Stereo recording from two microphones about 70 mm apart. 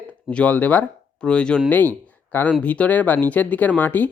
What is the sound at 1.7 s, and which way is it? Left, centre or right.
Speech, left.